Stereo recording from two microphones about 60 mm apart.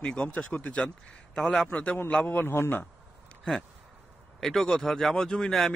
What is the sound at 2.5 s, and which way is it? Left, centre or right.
Speech, left.